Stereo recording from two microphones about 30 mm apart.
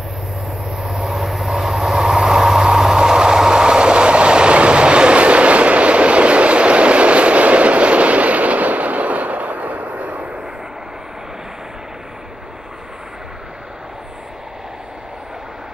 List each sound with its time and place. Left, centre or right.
0.7 s train: centre; by 10.3 s right